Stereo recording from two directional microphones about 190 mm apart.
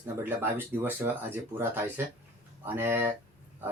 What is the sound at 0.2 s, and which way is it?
Speech, 10° right (ahead or behind).